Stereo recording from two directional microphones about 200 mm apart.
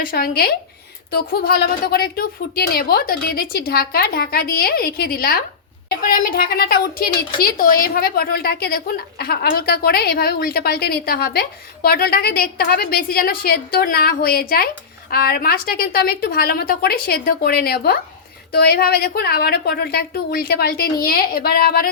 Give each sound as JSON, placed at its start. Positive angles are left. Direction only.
{"t": 0.0, "sound": "a woman's voice", "side_deg": 50}